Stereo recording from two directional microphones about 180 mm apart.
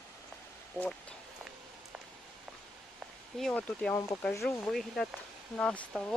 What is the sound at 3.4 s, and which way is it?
Speech, 5° left (ahead or behind).